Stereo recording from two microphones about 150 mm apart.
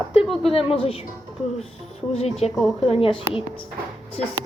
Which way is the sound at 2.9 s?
35° left (ahead or behind).